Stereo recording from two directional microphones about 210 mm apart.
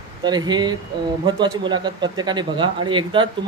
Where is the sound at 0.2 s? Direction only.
20° right (ahead or behind).